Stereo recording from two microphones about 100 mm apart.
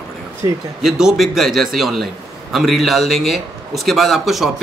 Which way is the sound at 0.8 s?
5° right (ahead or behind).